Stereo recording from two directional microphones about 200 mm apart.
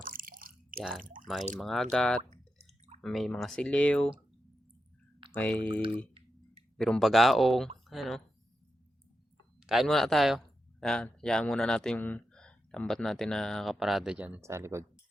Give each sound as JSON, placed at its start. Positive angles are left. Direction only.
{"t": 0.0, "sound": "drip", "side_deg": -45}
{"t": 1.5, "sound": "speech", "side_deg": 0}
{"t": 2.3, "sound": "drip", "side_deg": -35}
{"t": 3.0, "sound": "speech", "side_deg": 0}
{"t": 5.3, "sound": "speech", "side_deg": 5}
{"t": 6.7, "sound": "speech", "side_deg": 0}
{"t": 9.6, "sound": "speech", "side_deg": 0}